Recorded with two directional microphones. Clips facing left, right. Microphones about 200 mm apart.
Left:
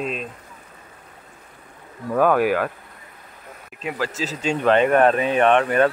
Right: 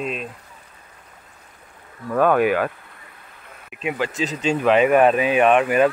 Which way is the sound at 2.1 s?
5° left (ahead or behind).